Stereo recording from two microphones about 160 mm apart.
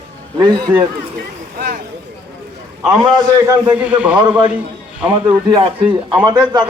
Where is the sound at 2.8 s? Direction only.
5° right (ahead or behind).